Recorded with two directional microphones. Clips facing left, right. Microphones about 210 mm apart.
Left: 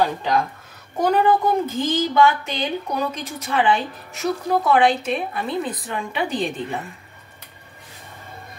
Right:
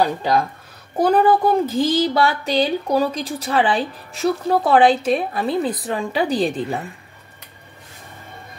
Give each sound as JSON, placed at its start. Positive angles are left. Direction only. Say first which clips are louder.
{"t": 0.9, "sound": "a woman's voice", "louder": "right 3 dB", "side_deg": -35}